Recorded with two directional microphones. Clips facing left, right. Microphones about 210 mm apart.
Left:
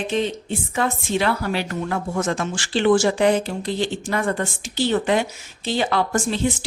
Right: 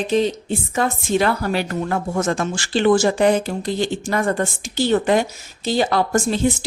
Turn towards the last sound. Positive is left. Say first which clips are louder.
# right 3 dB
turn(degrees=-40)  # may be behind; listen again after turning